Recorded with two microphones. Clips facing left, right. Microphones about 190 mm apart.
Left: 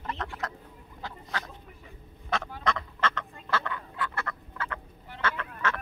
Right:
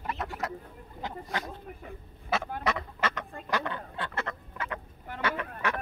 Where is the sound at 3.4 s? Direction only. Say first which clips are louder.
Right 1 dB; 15° right (ahead or behind).